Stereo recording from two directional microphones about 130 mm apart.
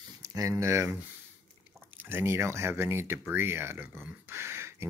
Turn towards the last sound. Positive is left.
turn(degrees=-20)  # may be behind; listen again after turning